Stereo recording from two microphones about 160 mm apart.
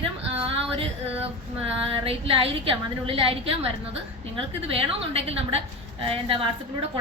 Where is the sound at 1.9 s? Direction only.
35° right (ahead or behind).